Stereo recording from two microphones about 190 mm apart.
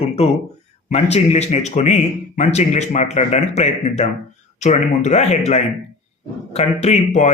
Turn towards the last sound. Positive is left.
turn(degrees=35)  # may be behind; listen again after turning